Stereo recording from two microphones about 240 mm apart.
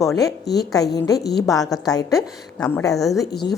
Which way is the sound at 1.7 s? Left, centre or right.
Centre.